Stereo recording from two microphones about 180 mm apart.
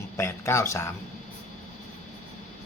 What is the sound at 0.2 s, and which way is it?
Speech, 15° left (ahead or behind).